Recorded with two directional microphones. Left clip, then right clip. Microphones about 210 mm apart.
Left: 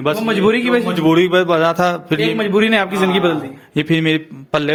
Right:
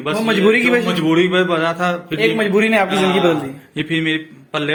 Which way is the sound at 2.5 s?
30° left (ahead or behind).